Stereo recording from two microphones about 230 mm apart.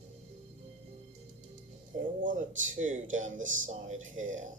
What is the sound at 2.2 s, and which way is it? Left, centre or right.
Speech, right.